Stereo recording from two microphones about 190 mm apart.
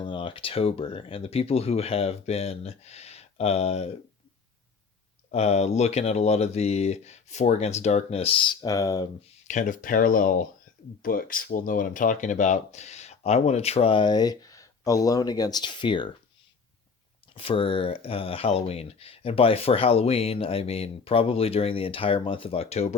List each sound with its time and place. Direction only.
0.0 s speech: 25° left (ahead or behind)
5.3 s speech: 35° left (ahead or behind); by 9.0 s 20° left (ahead or behind)
9.5 s speech: 45° left (ahead or behind); by 16.1 s 25° left (ahead or behind)
17.3 s speech: 30° left (ahead or behind)